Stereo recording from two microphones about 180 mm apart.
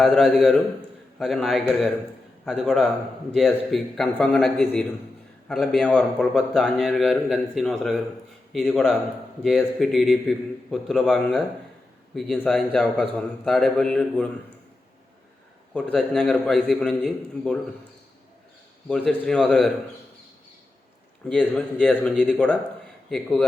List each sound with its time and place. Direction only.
0.0 s a man's voice: centre (ahead or behind)
15.7 s a man's voice: 5° left (ahead or behind)
18.9 s a man's voice: 5° left (ahead or behind)
21.2 s a man's voice: 5° left (ahead or behind)